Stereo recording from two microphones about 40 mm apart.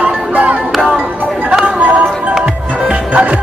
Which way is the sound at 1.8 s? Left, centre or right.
Right.